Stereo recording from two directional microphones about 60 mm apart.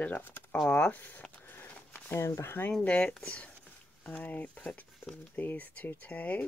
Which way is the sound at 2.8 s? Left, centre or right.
Left.